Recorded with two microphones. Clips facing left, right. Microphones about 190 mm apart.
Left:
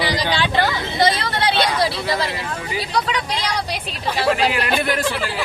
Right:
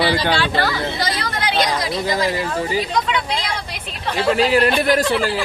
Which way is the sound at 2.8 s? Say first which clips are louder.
Right 2 dB; 35° left (ahead or behind).